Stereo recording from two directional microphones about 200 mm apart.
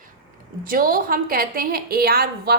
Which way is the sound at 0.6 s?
45° right (ahead or behind).